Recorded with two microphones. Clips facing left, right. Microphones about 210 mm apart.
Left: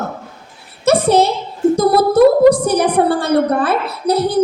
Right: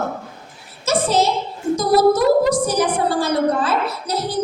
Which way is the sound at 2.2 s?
60° left (ahead or behind).